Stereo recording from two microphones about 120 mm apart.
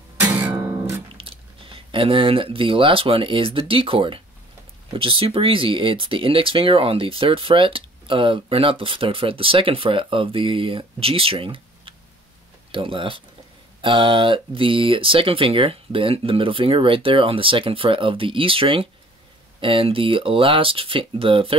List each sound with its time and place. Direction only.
0.4 s music: 15° right (ahead or behind)
1.1 s speech: 50° right (ahead or behind)